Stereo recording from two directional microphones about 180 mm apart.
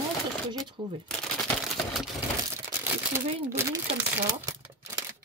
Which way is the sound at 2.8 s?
10° right (ahead or behind).